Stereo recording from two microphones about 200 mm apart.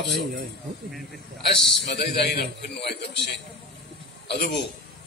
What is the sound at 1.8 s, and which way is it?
A man's voice, 55° left (ahead or behind).